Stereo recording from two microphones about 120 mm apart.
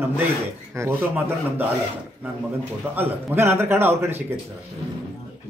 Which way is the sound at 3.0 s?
20° right (ahead or behind).